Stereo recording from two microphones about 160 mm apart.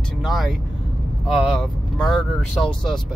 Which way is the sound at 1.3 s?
Centre (ahead or behind).